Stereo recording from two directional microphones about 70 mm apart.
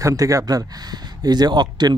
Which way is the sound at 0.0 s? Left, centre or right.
Right.